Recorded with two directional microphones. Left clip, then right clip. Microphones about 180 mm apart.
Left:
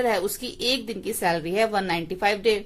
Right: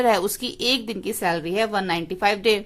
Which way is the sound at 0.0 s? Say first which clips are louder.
Right 4 dB; 20° right (ahead or behind).